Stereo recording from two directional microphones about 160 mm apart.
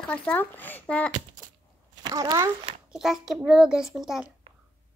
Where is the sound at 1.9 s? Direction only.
25° right (ahead or behind).